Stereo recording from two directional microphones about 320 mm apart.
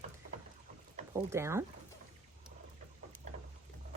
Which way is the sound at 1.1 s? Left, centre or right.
Centre.